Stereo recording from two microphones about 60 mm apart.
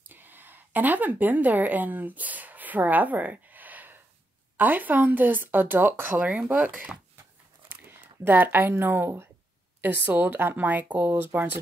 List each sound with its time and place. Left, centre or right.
0.1 s a woman's voice: right
7.6 s speech: right